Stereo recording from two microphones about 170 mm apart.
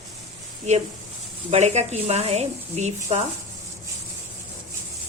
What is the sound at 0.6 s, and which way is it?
Speech, 40° right (ahead or behind).